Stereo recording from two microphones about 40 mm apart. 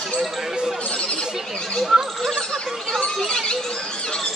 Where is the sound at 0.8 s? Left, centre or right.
Left.